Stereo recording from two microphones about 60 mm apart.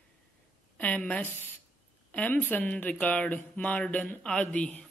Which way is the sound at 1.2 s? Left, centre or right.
Left.